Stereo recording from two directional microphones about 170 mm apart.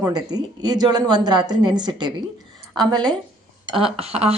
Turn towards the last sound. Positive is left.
turn(degrees=-35)  # may be behind; listen again after turning